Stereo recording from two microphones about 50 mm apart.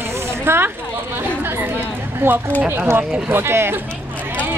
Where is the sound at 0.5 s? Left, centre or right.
Right.